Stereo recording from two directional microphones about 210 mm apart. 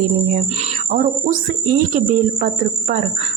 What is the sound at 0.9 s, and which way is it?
A woman's voice, 40° right (ahead or behind).